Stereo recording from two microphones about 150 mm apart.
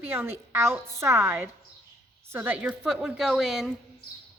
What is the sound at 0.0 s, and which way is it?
A woman's voice, 15° right (ahead or behind).